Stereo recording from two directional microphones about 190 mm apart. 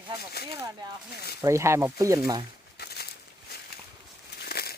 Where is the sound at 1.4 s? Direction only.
15° right (ahead or behind).